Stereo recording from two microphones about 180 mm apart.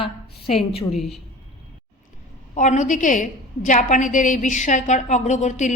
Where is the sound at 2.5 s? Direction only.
40° left (ahead or behind).